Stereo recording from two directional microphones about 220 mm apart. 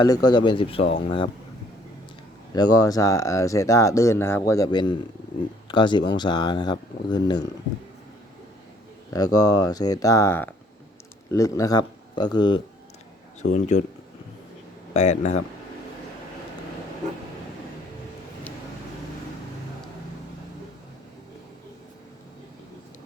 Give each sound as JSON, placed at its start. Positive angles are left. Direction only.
{"t": 0.0, "sound": "speech", "side_deg": 20}
{"t": 2.5, "sound": "speech", "side_deg": 15}
{"t": 9.0, "sound": "speech", "side_deg": 15}
{"t": 13.5, "sound": "speech", "side_deg": 35}
{"t": 14.9, "sound": "speech", "side_deg": 30}